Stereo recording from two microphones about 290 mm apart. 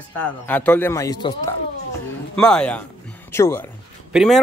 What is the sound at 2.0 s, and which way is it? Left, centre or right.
A man's voice, centre.